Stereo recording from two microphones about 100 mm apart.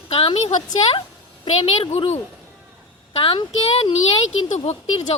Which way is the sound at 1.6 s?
80° left.